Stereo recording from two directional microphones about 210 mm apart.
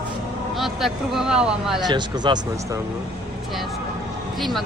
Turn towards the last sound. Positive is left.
turn(degrees=0)  # may be behind; listen again after turning